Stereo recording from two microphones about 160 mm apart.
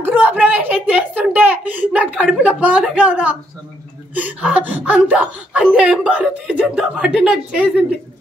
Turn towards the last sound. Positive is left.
turn(degrees=-5)  # may be behind; listen again after turning